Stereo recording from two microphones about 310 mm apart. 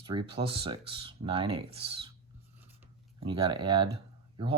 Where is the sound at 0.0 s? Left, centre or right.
Centre.